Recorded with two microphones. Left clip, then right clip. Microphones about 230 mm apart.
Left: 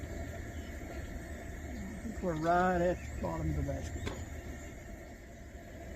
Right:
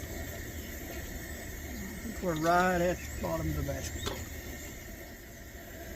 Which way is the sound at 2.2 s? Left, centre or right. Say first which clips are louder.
Right 3 dB; right.